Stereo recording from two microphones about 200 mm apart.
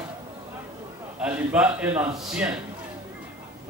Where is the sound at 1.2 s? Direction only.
5° right (ahead or behind).